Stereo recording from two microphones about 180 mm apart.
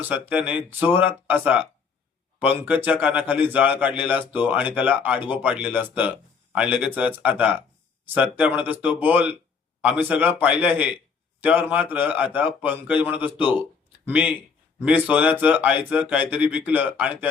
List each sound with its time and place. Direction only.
0.0 s a man's voice: 10° right (ahead or behind)